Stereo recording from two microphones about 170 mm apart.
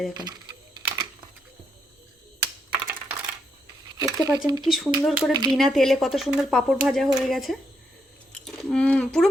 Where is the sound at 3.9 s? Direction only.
20° right (ahead or behind).